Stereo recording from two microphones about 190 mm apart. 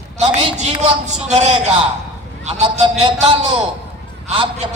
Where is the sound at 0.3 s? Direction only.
35° right (ahead or behind).